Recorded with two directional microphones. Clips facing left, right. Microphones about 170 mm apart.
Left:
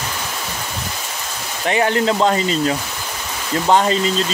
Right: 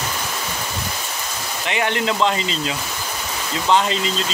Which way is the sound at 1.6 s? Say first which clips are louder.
Left 5 dB; 35° left (ahead or behind).